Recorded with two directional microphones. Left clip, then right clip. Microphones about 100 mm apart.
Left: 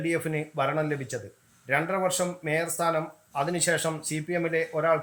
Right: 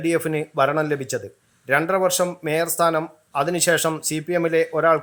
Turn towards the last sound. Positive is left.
turn(degrees=-25)  # may be behind; listen again after turning